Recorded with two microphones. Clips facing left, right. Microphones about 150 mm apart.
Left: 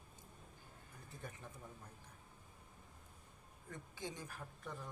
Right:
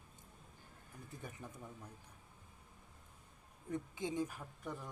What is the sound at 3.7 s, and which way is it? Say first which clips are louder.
Speech: right 8 dB; 20° right (ahead or behind).